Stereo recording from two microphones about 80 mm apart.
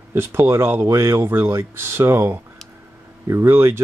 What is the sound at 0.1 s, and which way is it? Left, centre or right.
Speech, right.